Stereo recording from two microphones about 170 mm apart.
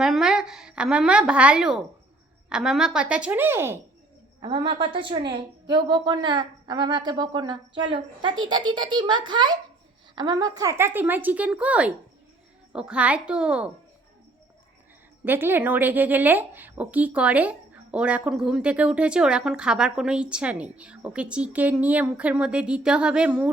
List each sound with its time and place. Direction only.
0.0 s a woman's voice: 5° right (ahead or behind)
4.4 s a woman's voice: 30° right (ahead or behind); by 13.7 s 5° right (ahead or behind)
15.2 s a woman's voice: 10° right (ahead or behind)